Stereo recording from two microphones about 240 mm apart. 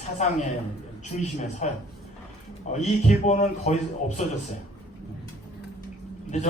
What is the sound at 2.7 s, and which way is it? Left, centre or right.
Speech, left.